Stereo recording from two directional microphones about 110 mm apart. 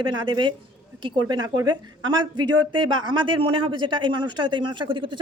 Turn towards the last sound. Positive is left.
turn(degrees=-50)  # may be behind; listen again after turning